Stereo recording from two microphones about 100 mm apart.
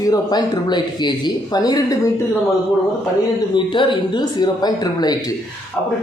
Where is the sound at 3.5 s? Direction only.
55° left (ahead or behind).